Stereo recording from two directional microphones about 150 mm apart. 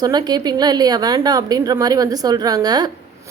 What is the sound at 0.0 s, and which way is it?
A woman's voice, 25° right (ahead or behind).